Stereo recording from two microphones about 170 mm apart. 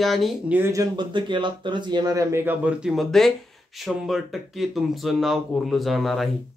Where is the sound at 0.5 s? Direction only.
15° right (ahead or behind).